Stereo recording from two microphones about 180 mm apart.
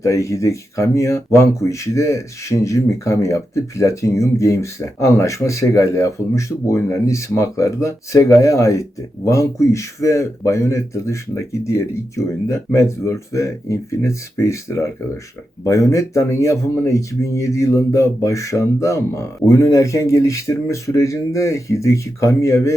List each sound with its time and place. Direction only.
0.0 s speech: 15° left (ahead or behind)